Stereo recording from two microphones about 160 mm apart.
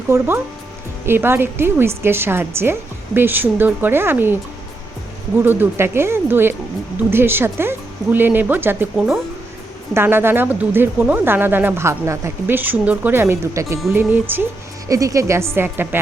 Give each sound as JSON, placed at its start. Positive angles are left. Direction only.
{"t": 0.1, "sound": "speech", "side_deg": -15}
{"t": 5.5, "sound": "speech", "side_deg": -15}